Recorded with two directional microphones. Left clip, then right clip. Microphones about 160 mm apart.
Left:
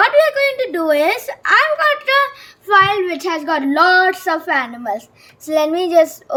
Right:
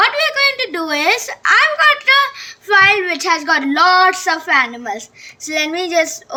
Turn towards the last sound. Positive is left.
turn(degrees=40)  # may be behind; listen again after turning